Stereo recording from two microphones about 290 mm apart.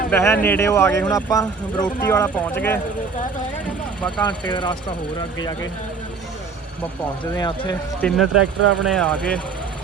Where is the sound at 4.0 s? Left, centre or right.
Centre.